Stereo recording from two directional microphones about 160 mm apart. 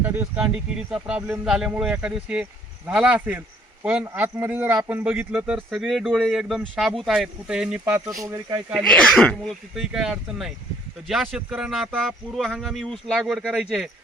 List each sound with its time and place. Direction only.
0.0 s a man's voice: 10° right (ahead or behind)
8.2 s speech: 20° right (ahead or behind)
8.7 s a man's voice: 5° left (ahead or behind)